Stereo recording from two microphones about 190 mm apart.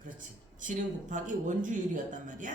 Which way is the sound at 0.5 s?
45° right (ahead or behind).